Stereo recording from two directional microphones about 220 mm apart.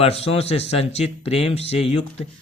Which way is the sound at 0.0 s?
25° left (ahead or behind).